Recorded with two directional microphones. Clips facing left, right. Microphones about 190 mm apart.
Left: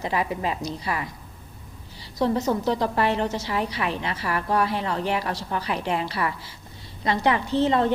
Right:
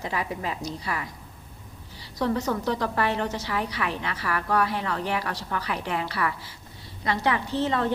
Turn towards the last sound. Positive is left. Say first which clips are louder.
# left 4 dB
turn(degrees=25)  # may be behind; listen again after turning